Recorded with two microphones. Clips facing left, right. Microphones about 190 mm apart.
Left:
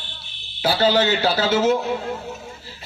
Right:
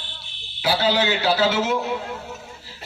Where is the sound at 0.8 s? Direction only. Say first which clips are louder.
Left 4 dB; 40° left (ahead or behind).